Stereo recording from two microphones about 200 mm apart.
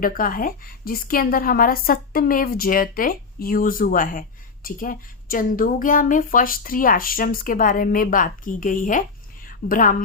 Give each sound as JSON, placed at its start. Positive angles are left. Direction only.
{"t": 0.0, "sound": "a woman's voice", "side_deg": 45}